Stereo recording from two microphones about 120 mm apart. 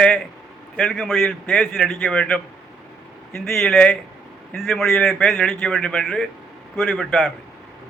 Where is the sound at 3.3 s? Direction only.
20° left (ahead or behind).